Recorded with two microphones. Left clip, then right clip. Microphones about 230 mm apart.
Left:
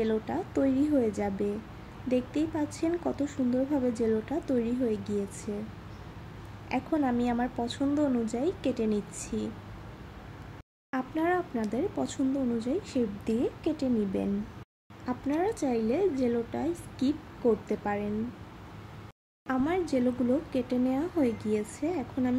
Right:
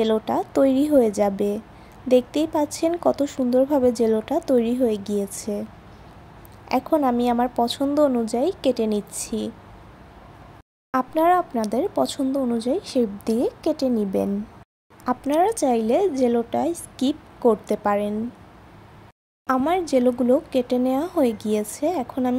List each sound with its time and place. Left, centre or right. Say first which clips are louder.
0.0 s speech: right 9 dB; right
6.7 s speech: right 9 dB; right
10.9 s a woman's voice: right 11 dB; right
19.4 s a woman's voice: right 8 dB; right